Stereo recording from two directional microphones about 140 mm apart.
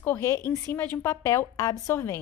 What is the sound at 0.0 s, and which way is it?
A woman's voice, 20° left (ahead or behind).